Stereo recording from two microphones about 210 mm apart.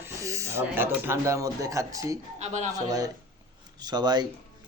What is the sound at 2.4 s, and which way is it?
Speech, 35° right (ahead or behind).